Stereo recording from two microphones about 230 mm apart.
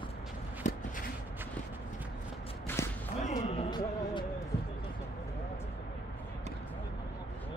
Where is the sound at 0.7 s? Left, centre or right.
Left.